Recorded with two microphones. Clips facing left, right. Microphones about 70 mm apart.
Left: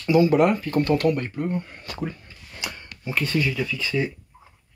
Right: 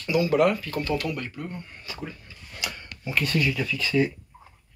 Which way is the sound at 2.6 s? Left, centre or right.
Left.